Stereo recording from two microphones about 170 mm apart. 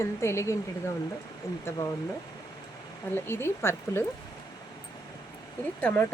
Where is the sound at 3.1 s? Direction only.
15° left (ahead or behind).